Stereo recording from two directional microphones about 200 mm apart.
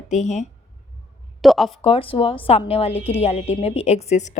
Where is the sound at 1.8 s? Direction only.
25° left (ahead or behind).